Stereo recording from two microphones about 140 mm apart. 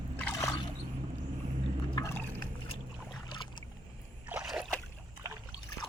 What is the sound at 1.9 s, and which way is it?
Liquid, 20° left (ahead or behind).